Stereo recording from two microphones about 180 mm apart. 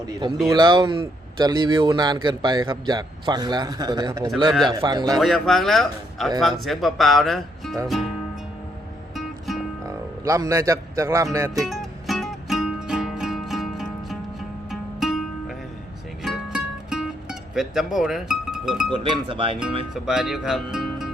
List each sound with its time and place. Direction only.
0.3 s speech: centre (ahead or behind)
0.5 s a man's voice: 25° right (ahead or behind)
5.2 s speech: centre (ahead or behind)
7.9 s music: centre (ahead or behind)
9.1 s music: centre (ahead or behind)
9.8 s speech: 20° right (ahead or behind)
11.7 s music: centre (ahead or behind)
18.9 s a man's voice: 30° right (ahead or behind)
19.9 s speech: 5° right (ahead or behind)